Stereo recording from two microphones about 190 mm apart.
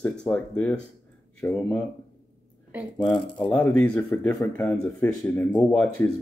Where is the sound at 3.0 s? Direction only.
5° left (ahead or behind).